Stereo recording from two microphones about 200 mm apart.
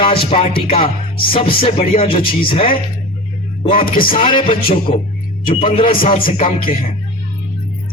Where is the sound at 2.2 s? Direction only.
45° left (ahead or behind).